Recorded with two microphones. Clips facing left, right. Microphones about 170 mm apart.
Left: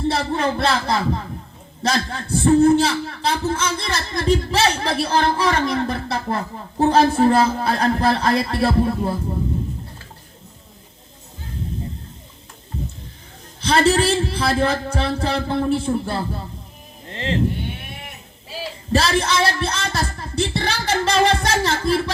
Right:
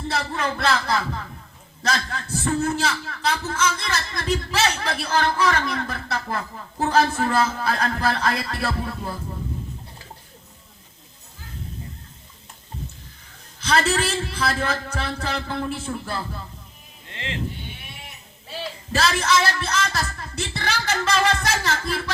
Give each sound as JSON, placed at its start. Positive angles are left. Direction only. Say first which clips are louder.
{"t": 0.1, "sound": "a man's voice", "louder": "left 1 dB", "side_deg": 30}
{"t": 13.6, "sound": "a man's voice", "louder": "left 5 dB", "side_deg": 30}
{"t": 17.1, "sound": "music", "louder": "left 9 dB", "side_deg": 35}
{"t": 17.6, "sound": "a sound", "louder": "left 8 dB", "side_deg": 55}
{"t": 18.9, "sound": "speech", "louder": "left 3 dB", "side_deg": 30}